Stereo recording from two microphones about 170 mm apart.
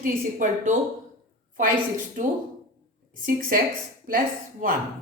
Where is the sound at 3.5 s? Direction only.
55° right (ahead or behind).